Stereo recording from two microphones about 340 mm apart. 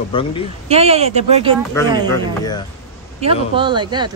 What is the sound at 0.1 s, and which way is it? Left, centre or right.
Speech, centre.